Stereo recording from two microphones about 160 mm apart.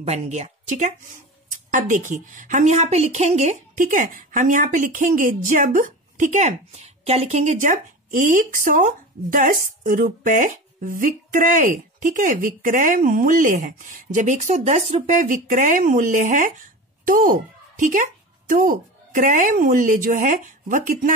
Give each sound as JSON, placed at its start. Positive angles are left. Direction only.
{"t": 0.0, "sound": "speech", "side_deg": -45}